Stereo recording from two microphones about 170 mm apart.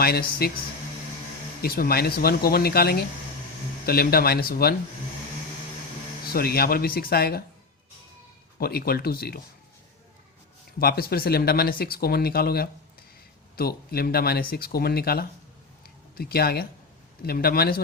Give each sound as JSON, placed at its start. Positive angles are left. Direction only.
{"t": 0.0, "sound": "speech", "side_deg": 65}
{"t": 1.6, "sound": "speech", "side_deg": 60}
{"t": 6.2, "sound": "speech", "side_deg": 65}
{"t": 8.5, "sound": "speech", "side_deg": 65}
{"t": 10.8, "sound": "speech", "side_deg": 65}